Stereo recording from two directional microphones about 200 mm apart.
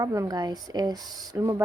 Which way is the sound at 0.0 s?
15° right (ahead or behind).